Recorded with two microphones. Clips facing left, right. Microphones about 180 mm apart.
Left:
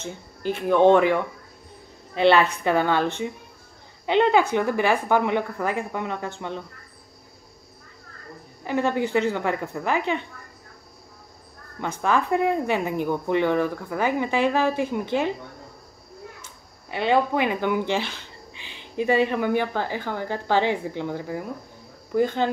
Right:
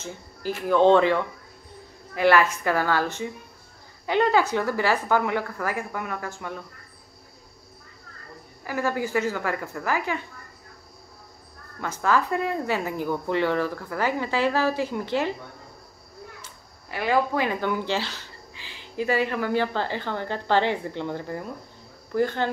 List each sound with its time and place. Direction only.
0.0 s speech: 20° left (ahead or behind)
8.6 s speech: 25° left (ahead or behind)
11.8 s speech: 20° left (ahead or behind)
16.9 s speech: 20° left (ahead or behind)